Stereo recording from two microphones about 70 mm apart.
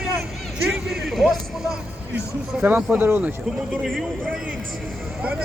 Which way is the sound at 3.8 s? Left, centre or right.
Centre.